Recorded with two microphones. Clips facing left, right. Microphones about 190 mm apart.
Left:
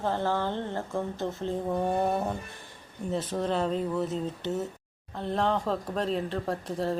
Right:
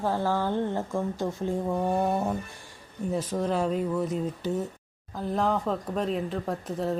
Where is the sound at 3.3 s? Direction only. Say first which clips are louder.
Right 1 dB; 10° right (ahead or behind).